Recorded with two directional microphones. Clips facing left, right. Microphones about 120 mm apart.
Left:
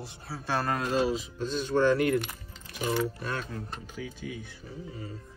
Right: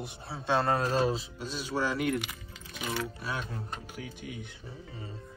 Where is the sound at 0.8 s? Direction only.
40° right (ahead or behind).